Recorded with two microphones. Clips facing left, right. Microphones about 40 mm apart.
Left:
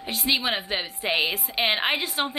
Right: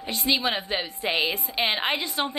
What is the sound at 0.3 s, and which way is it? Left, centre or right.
A woman's voice, centre.